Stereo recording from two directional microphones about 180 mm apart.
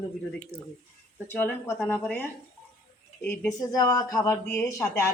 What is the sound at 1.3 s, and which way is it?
Speech, 10° left (ahead or behind).